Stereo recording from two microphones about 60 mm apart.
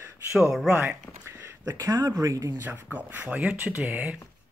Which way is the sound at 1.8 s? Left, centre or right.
Right.